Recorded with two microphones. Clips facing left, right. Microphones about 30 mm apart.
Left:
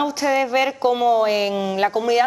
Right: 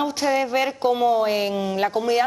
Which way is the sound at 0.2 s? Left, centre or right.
Centre.